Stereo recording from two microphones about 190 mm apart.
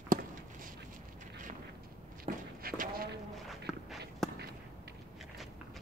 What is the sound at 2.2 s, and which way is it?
Walk, 50° right (ahead or behind).